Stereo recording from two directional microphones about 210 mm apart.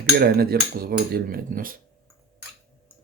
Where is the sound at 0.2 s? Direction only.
45° right (ahead or behind).